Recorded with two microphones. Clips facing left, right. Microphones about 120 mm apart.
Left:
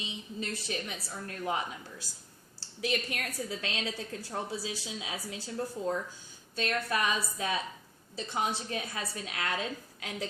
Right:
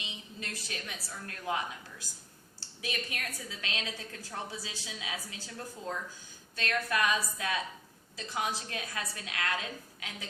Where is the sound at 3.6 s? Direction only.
25° left (ahead or behind).